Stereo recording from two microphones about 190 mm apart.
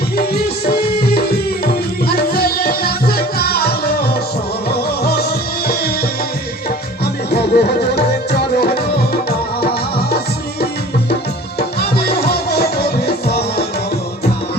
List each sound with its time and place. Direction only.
0.3 s music: 55° left (ahead or behind)
11.8 s music: 55° left (ahead or behind)